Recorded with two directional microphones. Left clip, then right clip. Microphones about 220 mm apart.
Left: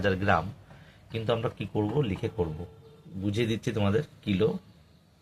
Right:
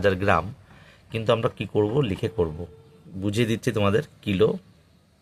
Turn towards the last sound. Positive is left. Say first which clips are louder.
# right 6 dB
turn(degrees=-45)  # may be behind; listen again after turning